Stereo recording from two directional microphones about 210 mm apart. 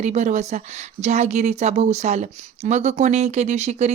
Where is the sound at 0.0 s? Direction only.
35° right (ahead or behind).